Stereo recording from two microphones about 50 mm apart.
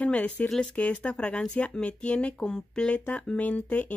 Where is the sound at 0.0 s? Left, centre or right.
Left.